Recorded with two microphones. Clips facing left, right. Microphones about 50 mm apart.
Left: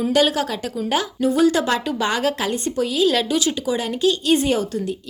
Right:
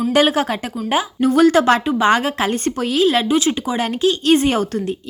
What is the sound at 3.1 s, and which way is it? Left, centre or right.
Speech, right.